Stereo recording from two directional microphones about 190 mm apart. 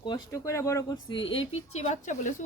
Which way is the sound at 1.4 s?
35° left (ahead or behind).